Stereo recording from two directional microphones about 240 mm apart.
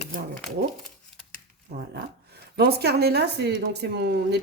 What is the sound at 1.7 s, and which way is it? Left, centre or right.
Speech, right.